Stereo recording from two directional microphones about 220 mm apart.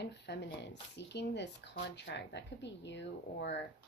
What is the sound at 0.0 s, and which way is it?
Speech, 50° left (ahead or behind).